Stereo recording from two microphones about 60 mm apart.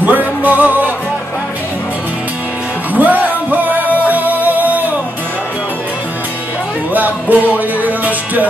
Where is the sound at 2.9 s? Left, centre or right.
Right.